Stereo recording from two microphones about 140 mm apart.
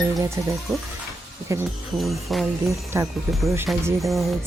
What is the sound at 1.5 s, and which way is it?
Speech, 20° right (ahead or behind).